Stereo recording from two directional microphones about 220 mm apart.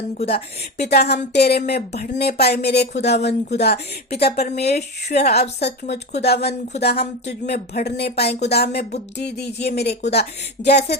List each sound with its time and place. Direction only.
0.2 s speech: 45° left (ahead or behind)